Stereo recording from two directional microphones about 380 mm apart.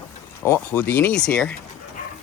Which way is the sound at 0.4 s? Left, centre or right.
Centre.